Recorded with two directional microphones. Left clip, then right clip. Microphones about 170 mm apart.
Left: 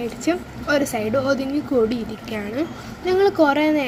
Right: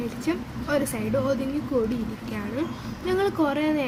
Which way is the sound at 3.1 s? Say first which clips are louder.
Left 7 dB; 5° left (ahead or behind).